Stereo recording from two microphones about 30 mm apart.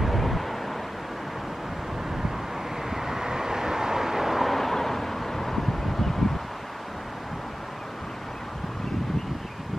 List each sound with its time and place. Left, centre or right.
0.0 s thunder: centre
2.9 s vehicle: centre
4.5 s vehicle: centre